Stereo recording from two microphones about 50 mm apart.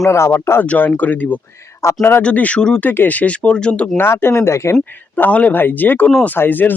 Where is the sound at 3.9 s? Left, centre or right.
Left.